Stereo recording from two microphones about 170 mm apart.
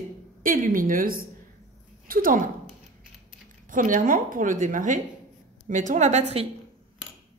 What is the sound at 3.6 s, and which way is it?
A woman's voice, 50° right (ahead or behind).